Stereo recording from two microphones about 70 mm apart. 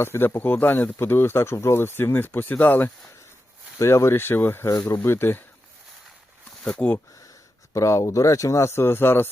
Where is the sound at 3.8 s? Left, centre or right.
Left.